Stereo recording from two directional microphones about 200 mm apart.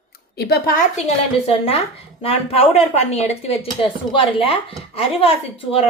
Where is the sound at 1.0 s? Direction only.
30° left (ahead or behind).